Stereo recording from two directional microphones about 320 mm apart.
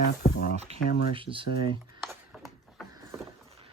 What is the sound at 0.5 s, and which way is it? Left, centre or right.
Speech, right.